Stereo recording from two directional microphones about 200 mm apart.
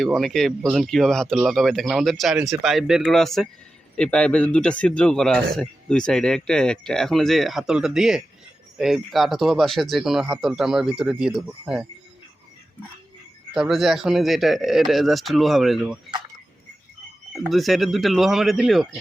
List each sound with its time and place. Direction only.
0.0 s speech: centre (ahead or behind)
13.5 s speech: centre (ahead or behind)
17.3 s speech: centre (ahead or behind)